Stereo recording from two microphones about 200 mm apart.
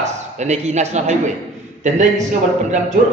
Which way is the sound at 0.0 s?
35° right (ahead or behind).